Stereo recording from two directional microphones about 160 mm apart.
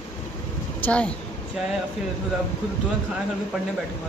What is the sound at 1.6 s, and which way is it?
Speech, 5° right (ahead or behind).